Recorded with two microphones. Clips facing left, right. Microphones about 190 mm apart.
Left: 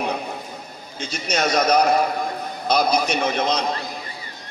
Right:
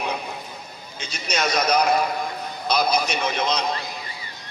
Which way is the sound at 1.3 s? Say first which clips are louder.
Left 3 dB; 45° left (ahead or behind).